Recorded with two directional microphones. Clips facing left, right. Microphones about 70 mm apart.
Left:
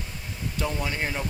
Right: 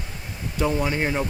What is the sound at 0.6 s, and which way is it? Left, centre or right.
Speech, right.